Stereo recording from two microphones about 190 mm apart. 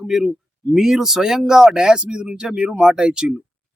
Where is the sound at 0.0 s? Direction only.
Centre (ahead or behind).